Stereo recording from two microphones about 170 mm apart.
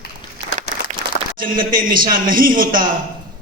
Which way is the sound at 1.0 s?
55° right (ahead or behind).